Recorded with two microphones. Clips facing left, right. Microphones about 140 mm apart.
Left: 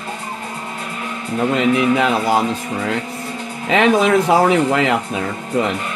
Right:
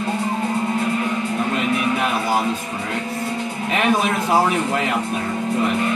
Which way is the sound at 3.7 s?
90° left.